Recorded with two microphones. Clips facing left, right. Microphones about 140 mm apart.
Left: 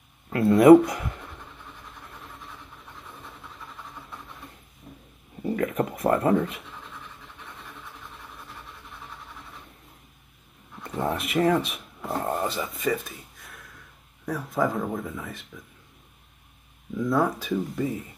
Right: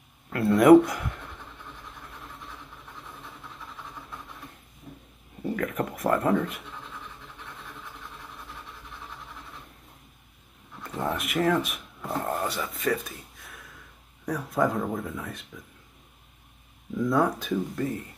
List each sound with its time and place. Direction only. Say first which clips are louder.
0.3 s writing: left 2 dB; centre (ahead or behind)
4.9 s a sound: right 1 dB; centre (ahead or behind)
5.6 s speech: left 4 dB; 25° left (ahead or behind)
6.1 s scratch: left 1 dB; centre (ahead or behind)
10.8 s speech: left 2 dB; centre (ahead or behind)
16.9 s speech: even; centre (ahead or behind)